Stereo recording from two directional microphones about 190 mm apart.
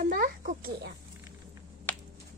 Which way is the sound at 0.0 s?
45° right (ahead or behind).